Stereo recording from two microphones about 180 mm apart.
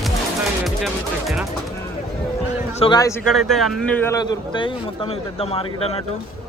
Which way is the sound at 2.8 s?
25° left (ahead or behind).